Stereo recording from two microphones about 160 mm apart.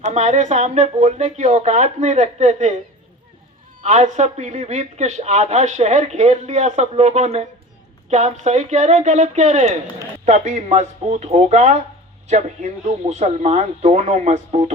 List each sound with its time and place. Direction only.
0.0 s speech: 45° right (ahead or behind)
3.8 s speech: 50° right (ahead or behind)